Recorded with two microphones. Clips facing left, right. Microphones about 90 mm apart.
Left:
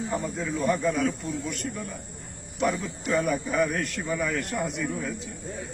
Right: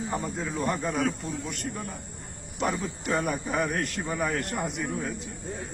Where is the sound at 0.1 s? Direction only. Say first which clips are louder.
Left 2 dB; 35° right (ahead or behind).